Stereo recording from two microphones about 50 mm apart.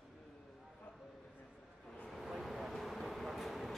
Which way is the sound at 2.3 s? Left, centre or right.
Centre.